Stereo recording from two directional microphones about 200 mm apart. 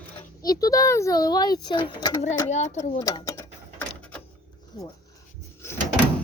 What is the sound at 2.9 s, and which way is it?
Speech, 20° left (ahead or behind).